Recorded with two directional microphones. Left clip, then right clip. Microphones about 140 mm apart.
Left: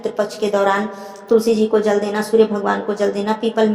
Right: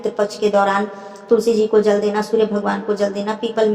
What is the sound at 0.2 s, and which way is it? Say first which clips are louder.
Speech: right 1 dB; 35° left (ahead or behind).